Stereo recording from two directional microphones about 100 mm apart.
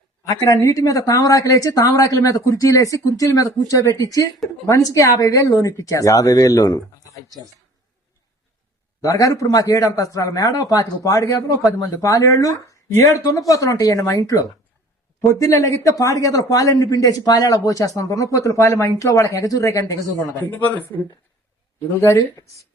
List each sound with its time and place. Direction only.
0.3 s speech: 35° left (ahead or behind)
9.0 s speech: 35° left (ahead or behind)
20.4 s speech: 20° left (ahead or behind)
22.2 s speech: 35° left (ahead or behind)